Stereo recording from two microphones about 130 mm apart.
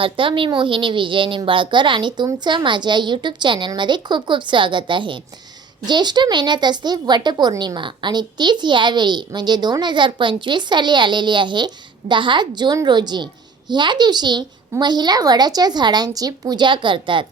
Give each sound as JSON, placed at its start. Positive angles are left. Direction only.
{"t": 0.0, "sound": "speech", "side_deg": -40}